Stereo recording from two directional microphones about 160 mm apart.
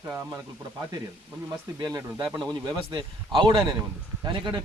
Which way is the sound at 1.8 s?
25° right (ahead or behind).